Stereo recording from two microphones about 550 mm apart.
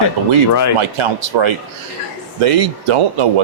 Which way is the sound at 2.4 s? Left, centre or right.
Right.